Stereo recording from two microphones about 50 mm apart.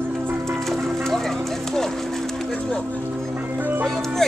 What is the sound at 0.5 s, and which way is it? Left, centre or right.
Music, centre.